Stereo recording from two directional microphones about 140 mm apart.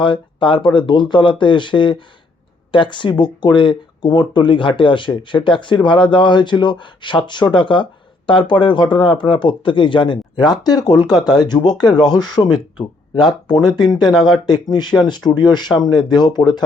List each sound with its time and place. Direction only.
0.0 s speech: 35° left (ahead or behind)
14.2 s speech: 5° left (ahead or behind)
14.4 s speech: 30° left (ahead or behind)